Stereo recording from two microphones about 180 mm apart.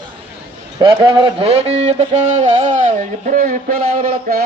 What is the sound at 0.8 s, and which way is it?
Speech, 25° right (ahead or behind).